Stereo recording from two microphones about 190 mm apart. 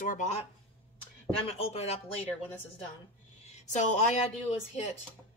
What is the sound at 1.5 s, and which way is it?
Speech, 30° left (ahead or behind).